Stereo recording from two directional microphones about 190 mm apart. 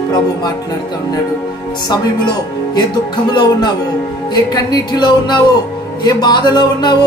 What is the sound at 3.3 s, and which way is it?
A woman's voice, 25° left (ahead or behind).